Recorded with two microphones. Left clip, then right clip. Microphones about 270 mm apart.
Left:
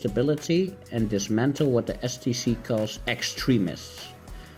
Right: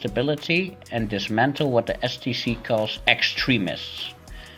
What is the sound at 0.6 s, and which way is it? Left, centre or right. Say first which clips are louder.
Speech: right 1 dB; right.